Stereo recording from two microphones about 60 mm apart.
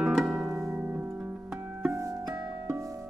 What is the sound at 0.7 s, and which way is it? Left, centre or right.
Music, right.